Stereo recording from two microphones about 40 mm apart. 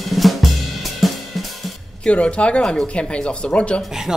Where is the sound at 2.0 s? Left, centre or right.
Left.